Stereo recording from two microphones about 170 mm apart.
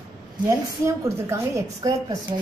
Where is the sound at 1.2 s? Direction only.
20° right (ahead or behind).